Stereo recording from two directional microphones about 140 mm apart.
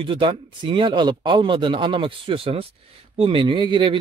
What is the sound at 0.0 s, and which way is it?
Speech, 35° right (ahead or behind).